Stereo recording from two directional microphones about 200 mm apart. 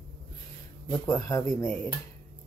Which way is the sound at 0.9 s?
20° left (ahead or behind).